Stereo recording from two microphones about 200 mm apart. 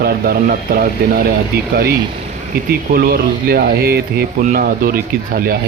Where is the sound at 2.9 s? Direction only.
50° right (ahead or behind).